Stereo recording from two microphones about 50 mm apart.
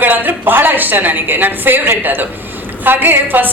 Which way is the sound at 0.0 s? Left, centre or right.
Right.